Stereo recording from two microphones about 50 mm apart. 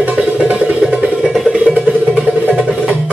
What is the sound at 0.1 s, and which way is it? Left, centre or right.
Music, centre.